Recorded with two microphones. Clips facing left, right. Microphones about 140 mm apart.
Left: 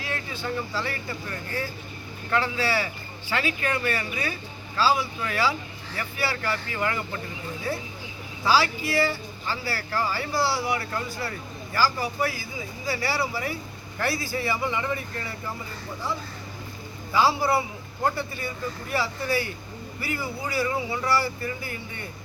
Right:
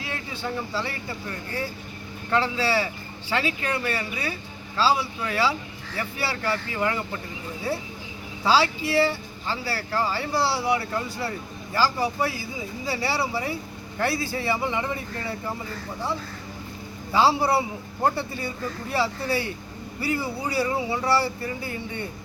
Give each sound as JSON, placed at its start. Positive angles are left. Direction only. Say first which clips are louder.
{"t": 0.0, "sound": "speech", "louder": "even", "side_deg": -20}
{"t": 2.3, "sound": "speech", "louder": "right 2 dB", "side_deg": -25}
{"t": 8.4, "sound": "speech", "louder": "right 1 dB", "side_deg": -25}
{"t": 17.1, "sound": "speech", "louder": "right 2 dB", "side_deg": -30}